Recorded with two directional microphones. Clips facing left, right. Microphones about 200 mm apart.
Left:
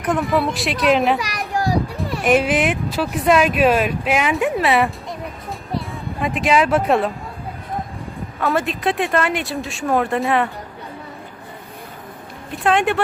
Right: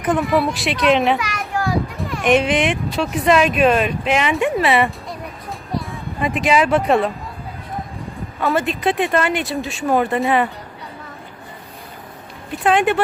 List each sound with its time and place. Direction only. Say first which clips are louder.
0.0 s speech: right 1 dB; centre (ahead or behind)
1.2 s children playing: left 1 dB; 35° left (ahead or behind)
2.2 s speech: right 1 dB; 5° left (ahead or behind)
5.9 s speech: right 1 dB; centre (ahead or behind)
8.4 s speech: right 1 dB; centre (ahead or behind)
12.5 s speech: right 1 dB; centre (ahead or behind)